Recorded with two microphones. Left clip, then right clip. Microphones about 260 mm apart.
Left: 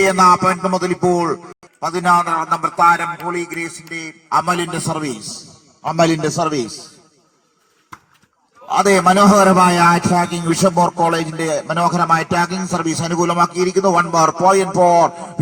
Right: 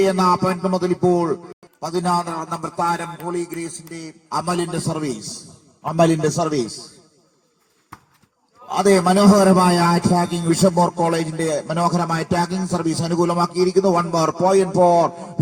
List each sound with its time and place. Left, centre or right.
0.1 s a man's voice: left
1.2 s a man's voice: centre
5.3 s a sound: centre
6.1 s speech: centre
8.7 s a man's voice: left